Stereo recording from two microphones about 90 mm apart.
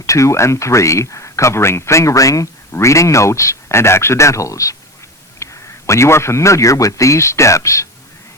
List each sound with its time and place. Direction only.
0.0 s a man's voice: 35° left (ahead or behind)